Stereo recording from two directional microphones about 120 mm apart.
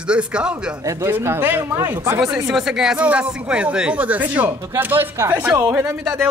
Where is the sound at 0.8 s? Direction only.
20° right (ahead or behind).